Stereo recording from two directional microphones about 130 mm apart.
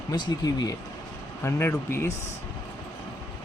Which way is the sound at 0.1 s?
30° left (ahead or behind).